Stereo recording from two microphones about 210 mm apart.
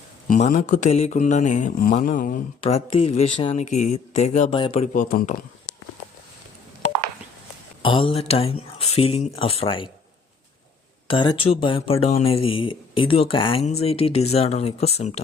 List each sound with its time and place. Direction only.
0.3 s speech: 35° left (ahead or behind)
5.0 s speech: 40° left (ahead or behind)
7.8 s speech: 25° left (ahead or behind)
11.1 s speech: 25° left (ahead or behind)